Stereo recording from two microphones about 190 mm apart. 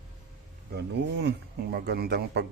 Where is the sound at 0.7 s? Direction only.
65° right (ahead or behind).